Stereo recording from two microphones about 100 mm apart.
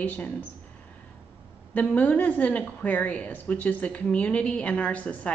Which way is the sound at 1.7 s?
15° left (ahead or behind).